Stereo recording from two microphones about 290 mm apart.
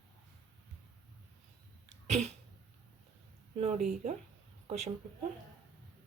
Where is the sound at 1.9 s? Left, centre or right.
Right.